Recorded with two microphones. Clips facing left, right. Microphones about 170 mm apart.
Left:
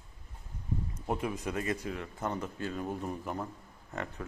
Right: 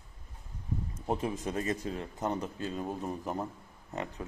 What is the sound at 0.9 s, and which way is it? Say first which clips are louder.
Speech: right 2 dB; 25° right (ahead or behind).